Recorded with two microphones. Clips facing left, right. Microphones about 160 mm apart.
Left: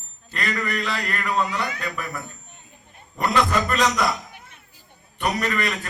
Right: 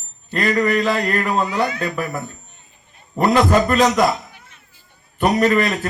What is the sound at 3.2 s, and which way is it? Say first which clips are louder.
Speech: right 7 dB; 40° right (ahead or behind).